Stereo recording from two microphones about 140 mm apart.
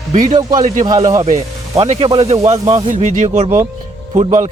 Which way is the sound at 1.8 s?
40° right (ahead or behind).